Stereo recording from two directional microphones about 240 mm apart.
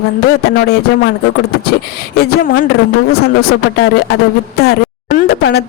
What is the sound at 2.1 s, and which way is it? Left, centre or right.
Speech, left.